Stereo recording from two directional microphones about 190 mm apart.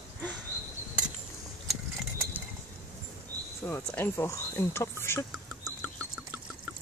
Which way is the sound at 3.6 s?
10° left (ahead or behind).